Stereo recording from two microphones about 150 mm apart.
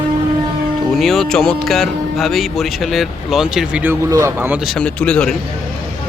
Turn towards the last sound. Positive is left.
turn(degrees=5)  # may be behind; listen again after turning